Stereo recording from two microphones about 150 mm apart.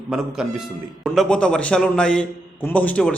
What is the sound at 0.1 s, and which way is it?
A man's voice, 5° right (ahead or behind).